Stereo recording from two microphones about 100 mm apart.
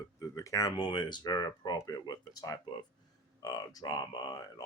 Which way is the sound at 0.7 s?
50° left (ahead or behind).